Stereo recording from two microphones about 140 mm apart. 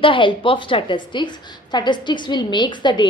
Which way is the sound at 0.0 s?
35° left (ahead or behind).